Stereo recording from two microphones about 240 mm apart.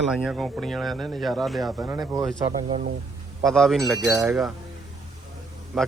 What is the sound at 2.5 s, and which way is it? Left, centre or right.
Speech, right.